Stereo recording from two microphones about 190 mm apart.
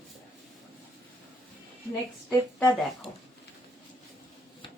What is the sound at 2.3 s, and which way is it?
Speech, centre (ahead or behind).